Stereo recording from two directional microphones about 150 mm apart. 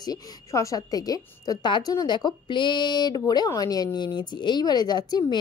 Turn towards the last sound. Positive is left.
turn(degrees=30)  # may be behind; listen again after turning